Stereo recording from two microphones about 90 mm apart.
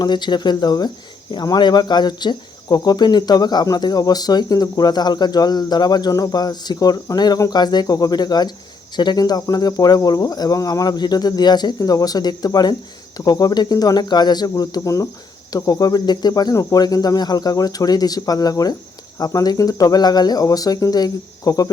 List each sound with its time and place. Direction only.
0.0 s speech: 55° left (ahead or behind)